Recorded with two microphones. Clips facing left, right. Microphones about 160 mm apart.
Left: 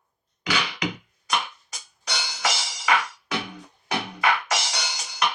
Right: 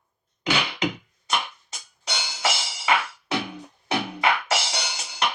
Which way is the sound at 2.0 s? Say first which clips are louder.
Right 1 dB; 25° right (ahead or behind).